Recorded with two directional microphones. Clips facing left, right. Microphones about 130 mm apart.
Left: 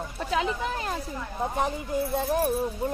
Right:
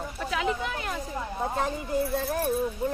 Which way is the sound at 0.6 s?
30° left (ahead or behind).